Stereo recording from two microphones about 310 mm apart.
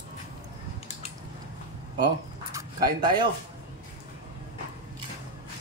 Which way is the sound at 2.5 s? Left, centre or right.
Centre.